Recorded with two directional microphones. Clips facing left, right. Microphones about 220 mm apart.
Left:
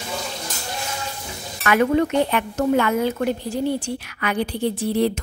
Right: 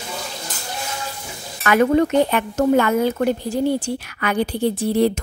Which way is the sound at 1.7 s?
40° right (ahead or behind).